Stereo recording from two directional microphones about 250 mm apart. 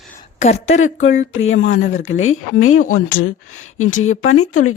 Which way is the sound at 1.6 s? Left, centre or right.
Left.